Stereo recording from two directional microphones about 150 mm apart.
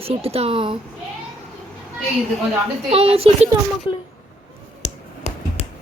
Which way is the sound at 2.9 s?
40° right (ahead or behind).